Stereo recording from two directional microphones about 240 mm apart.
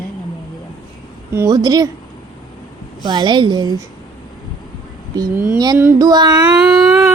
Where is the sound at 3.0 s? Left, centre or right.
Centre.